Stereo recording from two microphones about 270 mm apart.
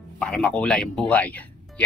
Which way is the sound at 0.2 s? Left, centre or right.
Centre.